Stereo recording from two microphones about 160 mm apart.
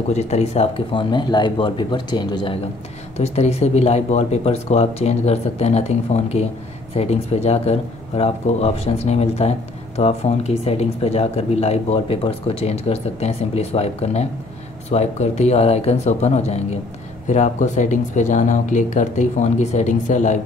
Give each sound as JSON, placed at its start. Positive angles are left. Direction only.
{"t": 0.1, "sound": "speech", "side_deg": 45}
{"t": 3.2, "sound": "speech", "side_deg": 40}